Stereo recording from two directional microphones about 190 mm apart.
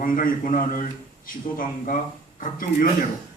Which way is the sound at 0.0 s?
45° left (ahead or behind).